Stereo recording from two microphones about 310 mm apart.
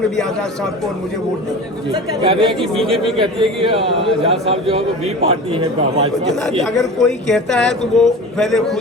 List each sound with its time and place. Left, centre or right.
2.2 s a man's voice: centre
2.8 s speech: centre
3.6 s a man's voice: centre
6.6 s speech: centre